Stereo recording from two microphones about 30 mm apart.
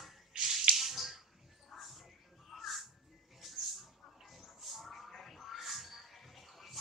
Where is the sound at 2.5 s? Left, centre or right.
Centre.